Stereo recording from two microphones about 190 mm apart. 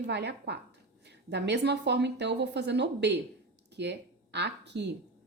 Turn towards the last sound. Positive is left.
turn(degrees=-65)  # may be behind; listen again after turning